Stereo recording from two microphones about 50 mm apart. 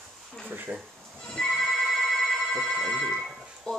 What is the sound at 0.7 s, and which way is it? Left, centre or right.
Speech, right.